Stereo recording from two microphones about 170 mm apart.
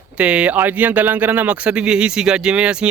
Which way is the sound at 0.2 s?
5° right (ahead or behind).